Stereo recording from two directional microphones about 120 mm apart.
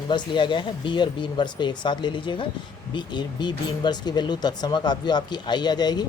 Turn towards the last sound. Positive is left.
turn(degrees=35)  # may be behind; listen again after turning